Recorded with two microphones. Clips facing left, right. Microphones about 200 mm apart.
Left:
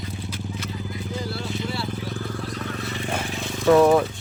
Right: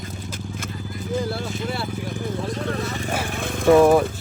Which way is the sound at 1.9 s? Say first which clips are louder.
Right 3 dB; 15° right (ahead or behind).